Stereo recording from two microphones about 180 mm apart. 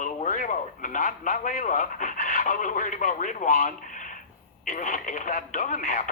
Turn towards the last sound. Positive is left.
turn(degrees=50)  # may be behind; listen again after turning